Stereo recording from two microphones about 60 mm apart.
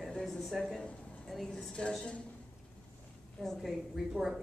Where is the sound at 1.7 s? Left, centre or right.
Centre.